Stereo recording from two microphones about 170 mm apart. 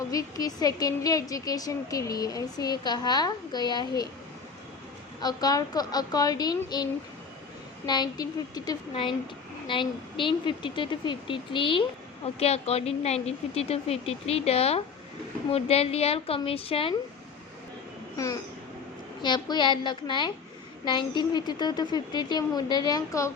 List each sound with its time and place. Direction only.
0.1 s a woman's voice: 20° left (ahead or behind)
5.2 s a woman's voice: 20° left (ahead or behind)
7.9 s a woman's voice: 25° left (ahead or behind)
18.2 s a woman's voice: 20° left (ahead or behind)